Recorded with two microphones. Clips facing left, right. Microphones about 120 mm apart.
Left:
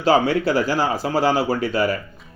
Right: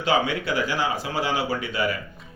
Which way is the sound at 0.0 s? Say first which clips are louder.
Left 6 dB; 35° left (ahead or behind).